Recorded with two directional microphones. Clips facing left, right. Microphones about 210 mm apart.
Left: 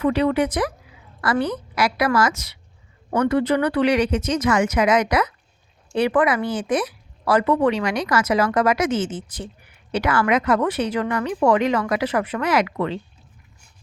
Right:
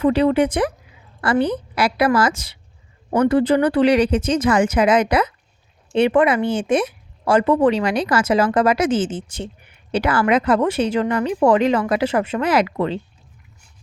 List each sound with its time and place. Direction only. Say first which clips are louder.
0.0 s speech: right 3 dB; 30° right (ahead or behind)